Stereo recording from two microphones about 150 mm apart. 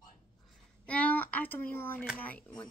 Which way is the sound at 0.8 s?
10° left (ahead or behind).